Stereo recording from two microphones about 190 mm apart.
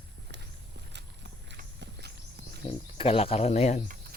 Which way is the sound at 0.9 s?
65° right (ahead or behind).